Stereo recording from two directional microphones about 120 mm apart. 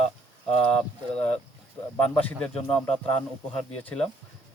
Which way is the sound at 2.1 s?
10° left (ahead or behind).